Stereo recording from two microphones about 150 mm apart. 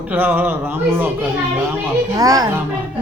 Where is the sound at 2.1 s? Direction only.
25° right (ahead or behind).